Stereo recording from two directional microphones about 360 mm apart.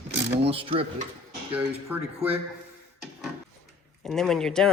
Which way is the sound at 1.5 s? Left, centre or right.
Centre.